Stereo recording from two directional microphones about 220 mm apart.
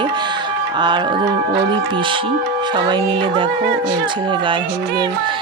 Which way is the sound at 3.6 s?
50° right (ahead or behind).